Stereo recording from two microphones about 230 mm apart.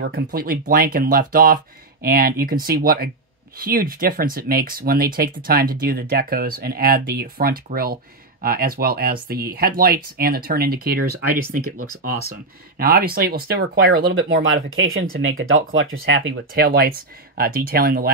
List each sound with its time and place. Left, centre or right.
0.0 s speech: right
12.7 s speech: right
14.4 s speech: right
15.0 s speech: right
15.4 s speech: right